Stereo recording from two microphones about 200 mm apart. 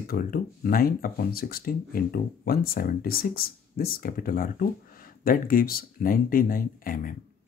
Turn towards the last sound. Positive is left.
turn(degrees=45)  # may be behind; listen again after turning